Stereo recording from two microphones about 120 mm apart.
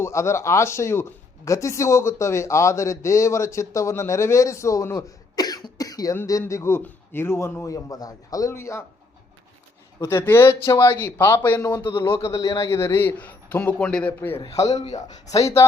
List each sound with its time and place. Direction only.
0.0 s a man's voice: 25° left (ahead or behind)
10.0 s a man's voice: 20° left (ahead or behind)
14.9 s a man's voice: 30° left (ahead or behind)